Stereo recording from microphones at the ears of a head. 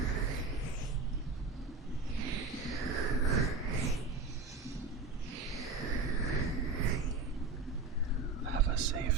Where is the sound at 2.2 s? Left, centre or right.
Right.